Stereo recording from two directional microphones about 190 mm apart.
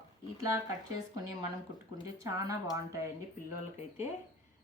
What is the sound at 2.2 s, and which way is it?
Speech, 15° right (ahead or behind).